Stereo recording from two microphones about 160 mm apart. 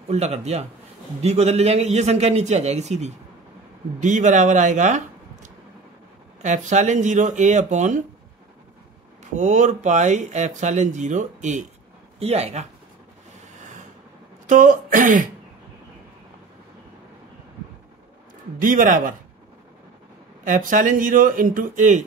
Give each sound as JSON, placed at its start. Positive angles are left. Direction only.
{"t": 0.1, "sound": "speech", "side_deg": -45}
{"t": 9.2, "sound": "speech", "side_deg": -50}
{"t": 13.6, "sound": "rub", "side_deg": -50}
{"t": 14.5, "sound": "speech", "side_deg": -55}
{"t": 18.6, "sound": "speech", "side_deg": -55}
{"t": 20.4, "sound": "speech", "side_deg": -55}